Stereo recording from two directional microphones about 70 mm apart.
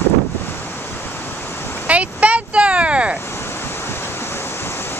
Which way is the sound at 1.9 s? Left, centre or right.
Centre.